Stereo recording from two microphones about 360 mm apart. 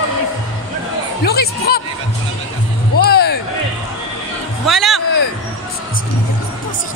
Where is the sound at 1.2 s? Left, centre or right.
Left.